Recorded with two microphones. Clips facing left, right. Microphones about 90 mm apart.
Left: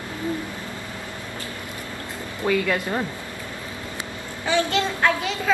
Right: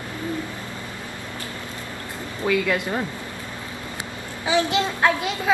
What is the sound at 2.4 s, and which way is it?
Speech, centre (ahead or behind).